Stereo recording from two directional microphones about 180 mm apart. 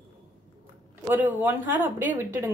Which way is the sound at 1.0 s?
10° right (ahead or behind).